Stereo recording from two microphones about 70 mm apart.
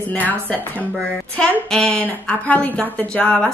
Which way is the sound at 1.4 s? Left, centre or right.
Centre.